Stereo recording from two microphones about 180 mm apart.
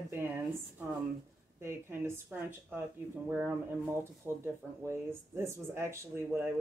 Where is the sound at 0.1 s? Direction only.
10° right (ahead or behind).